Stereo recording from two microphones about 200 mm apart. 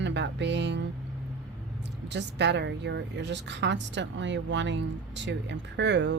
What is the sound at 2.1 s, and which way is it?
Speech, 60° right (ahead or behind).